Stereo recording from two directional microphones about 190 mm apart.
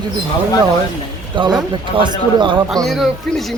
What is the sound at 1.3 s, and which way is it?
Speech, 25° right (ahead or behind).